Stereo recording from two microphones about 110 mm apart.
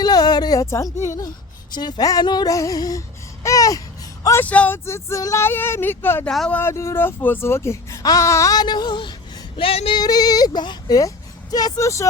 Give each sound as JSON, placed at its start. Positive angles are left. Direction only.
{"t": 0.0, "sound": "a sound", "side_deg": 40}
{"t": 1.0, "sound": "speech", "side_deg": 30}
{"t": 3.4, "sound": "babbling", "side_deg": 30}
{"t": 4.2, "sound": "a sound", "side_deg": 25}
{"t": 4.4, "sound": "speech", "side_deg": 15}
{"t": 4.9, "sound": "speech", "side_deg": 25}
{"t": 6.2, "sound": "speech", "side_deg": 5}
{"t": 6.5, "sound": "speech", "side_deg": 20}
{"t": 9.6, "sound": "female singing", "side_deg": 55}
{"t": 10.0, "sound": "speech", "side_deg": 35}